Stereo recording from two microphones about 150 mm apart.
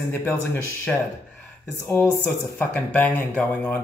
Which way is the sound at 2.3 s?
10° left (ahead or behind).